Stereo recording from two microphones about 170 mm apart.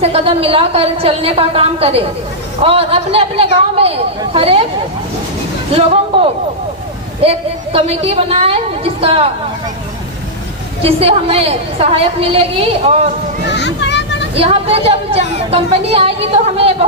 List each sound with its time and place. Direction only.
0.0 s a woman's voice: 35° right (ahead or behind)
7.2 s a woman's voice: 35° right (ahead or behind)
10.8 s a woman's voice: 35° right (ahead or behind)
13.5 s children playing: 90° left
14.3 s a woman's voice: 35° right (ahead or behind)